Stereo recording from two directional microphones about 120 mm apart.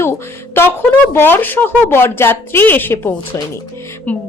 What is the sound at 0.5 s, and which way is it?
Speech, 20° left (ahead or behind).